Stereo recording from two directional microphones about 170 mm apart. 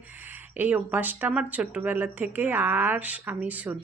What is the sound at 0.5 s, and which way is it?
Speech, 10° right (ahead or behind).